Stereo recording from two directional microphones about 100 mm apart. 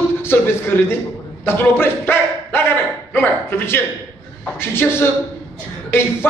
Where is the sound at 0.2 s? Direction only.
25° left (ahead or behind).